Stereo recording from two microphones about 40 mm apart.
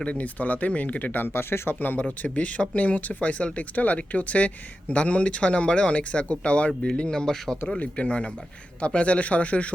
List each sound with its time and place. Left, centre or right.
0.0 s speech: left
0.3 s speech: left
1.1 s speech: left
1.8 s speech: left
2.2 s speech: left; by 7.6 s centre
7.8 s speech: left